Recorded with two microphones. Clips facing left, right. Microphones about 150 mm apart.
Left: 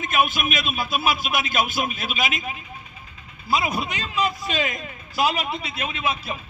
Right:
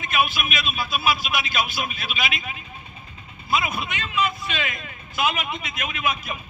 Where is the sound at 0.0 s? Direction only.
45° left (ahead or behind).